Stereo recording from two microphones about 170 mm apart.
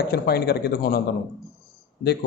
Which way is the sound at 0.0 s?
70° left (ahead or behind).